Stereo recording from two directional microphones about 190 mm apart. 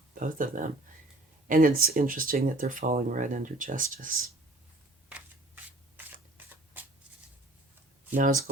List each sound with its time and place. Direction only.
0.1 s speech: 45° right (ahead or behind)
6.3 s a sound: 10° right (ahead or behind)
8.1 s speech: 45° right (ahead or behind)